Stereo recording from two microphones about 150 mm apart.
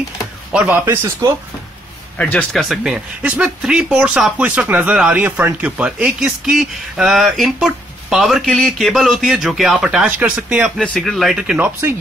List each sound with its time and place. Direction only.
0.5 s speech: 5° right (ahead or behind)
2.1 s speech: 10° left (ahead or behind); by 11.9 s 10° right (ahead or behind)